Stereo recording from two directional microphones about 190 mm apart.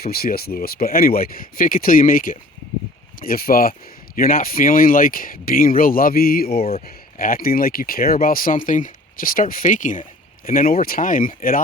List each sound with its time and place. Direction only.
0.0 s speech: 55° left (ahead or behind)